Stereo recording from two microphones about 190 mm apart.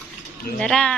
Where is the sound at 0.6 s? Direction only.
5° left (ahead or behind).